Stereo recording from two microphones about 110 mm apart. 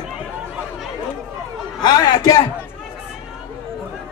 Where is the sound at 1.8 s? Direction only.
40° left (ahead or behind).